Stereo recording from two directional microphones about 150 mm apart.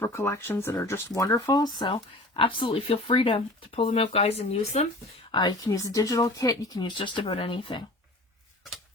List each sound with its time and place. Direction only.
0.0 s speech: 15° left (ahead or behind); by 4.9 s 45° left (ahead or behind)
5.3 s speech: 30° left (ahead or behind)